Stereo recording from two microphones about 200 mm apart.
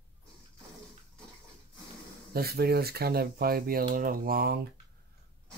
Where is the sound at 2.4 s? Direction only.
50° right (ahead or behind).